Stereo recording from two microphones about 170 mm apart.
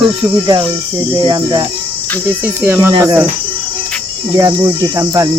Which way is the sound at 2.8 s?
15° right (ahead or behind).